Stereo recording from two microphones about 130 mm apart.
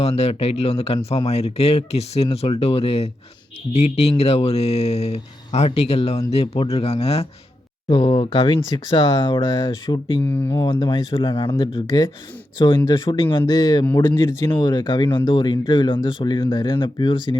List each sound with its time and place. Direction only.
0.0 s speech: 50° left (ahead or behind)
7.9 s speech: 35° left (ahead or behind)
10.2 s speech: 15° left (ahead or behind)
10.5 s speech: 35° left (ahead or behind)